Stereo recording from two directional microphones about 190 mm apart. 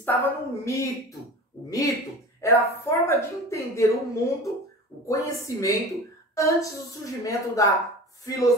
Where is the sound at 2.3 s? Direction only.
15° left (ahead or behind).